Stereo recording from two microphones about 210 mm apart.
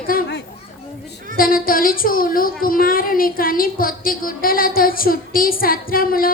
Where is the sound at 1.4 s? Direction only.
45° left (ahead or behind).